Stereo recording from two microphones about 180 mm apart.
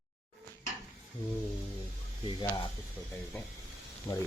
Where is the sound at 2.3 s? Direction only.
25° left (ahead or behind).